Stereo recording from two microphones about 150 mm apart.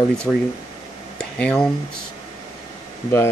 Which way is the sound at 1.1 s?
5° left (ahead or behind).